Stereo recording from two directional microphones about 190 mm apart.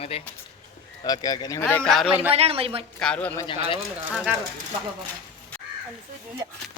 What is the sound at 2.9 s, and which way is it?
Speech, 5° left (ahead or behind).